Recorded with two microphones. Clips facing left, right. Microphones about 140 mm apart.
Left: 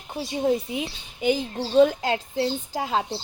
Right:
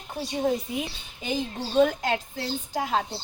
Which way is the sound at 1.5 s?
30° left (ahead or behind).